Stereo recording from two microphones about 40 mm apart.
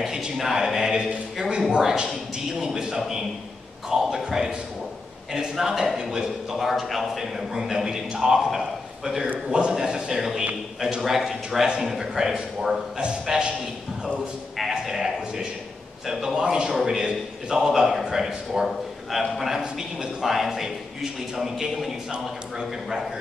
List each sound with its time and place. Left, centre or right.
0.0 s a sound: centre
1.7 s a man's voice: centre
6.6 s a man's voice: centre
11.0 s a man's voice: centre
14.6 s a man's voice: centre